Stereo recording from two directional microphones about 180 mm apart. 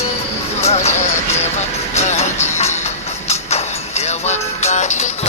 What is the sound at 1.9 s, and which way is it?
Music, 40° left (ahead or behind).